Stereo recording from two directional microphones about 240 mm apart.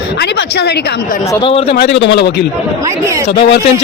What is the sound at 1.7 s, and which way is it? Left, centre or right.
A woman's voice, left.